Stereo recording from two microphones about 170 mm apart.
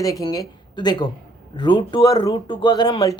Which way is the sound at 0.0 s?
20° left (ahead or behind).